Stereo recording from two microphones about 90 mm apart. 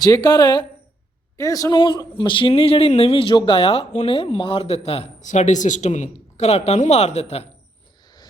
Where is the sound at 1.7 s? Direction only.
55° left (ahead or behind); by 4.9 s 90° left.